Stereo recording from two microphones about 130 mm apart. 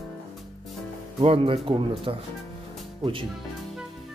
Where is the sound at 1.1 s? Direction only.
45° right (ahead or behind).